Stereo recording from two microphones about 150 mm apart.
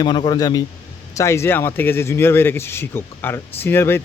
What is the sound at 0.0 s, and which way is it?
A man's voice, 30° left (ahead or behind).